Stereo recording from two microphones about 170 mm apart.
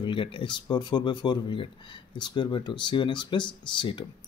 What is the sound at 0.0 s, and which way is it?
Speech, 30° left (ahead or behind).